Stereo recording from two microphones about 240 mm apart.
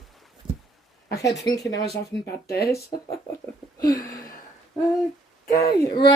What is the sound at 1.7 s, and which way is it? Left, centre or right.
Speech, left.